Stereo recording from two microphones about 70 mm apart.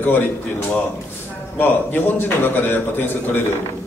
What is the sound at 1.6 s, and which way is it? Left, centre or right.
A man's voice, left.